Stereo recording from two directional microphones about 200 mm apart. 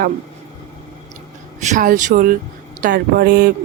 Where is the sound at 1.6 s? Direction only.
40° right (ahead or behind).